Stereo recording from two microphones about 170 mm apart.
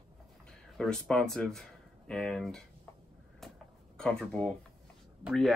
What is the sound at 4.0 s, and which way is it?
Speech, 5° left (ahead or behind).